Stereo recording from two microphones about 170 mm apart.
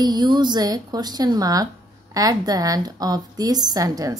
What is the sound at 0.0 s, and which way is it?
Speech, 25° right (ahead or behind).